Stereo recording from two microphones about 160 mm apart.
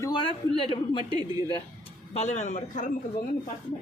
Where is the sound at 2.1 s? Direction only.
45° left (ahead or behind).